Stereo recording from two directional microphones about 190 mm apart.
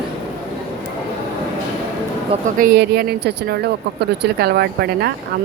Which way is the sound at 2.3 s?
45° right (ahead or behind).